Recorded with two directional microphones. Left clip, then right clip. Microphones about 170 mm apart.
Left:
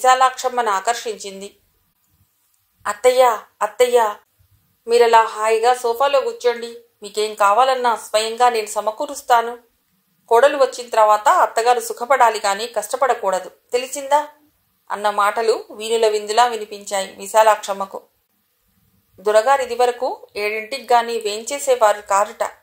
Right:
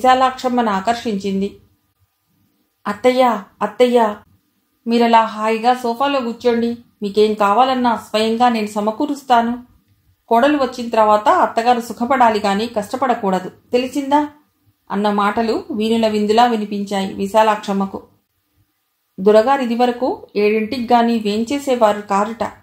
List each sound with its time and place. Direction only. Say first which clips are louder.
0.0 s speech: right 1 dB; 40° left (ahead or behind)
2.8 s speech: even; 40° left (ahead or behind)
19.2 s speech: right 3 dB; 40° left (ahead or behind)